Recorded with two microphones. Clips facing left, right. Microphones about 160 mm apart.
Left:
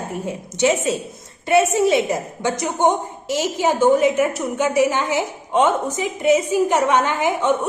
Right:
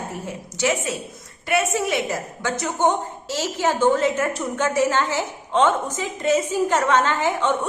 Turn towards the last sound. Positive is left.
turn(degrees=10)  # may be behind; listen again after turning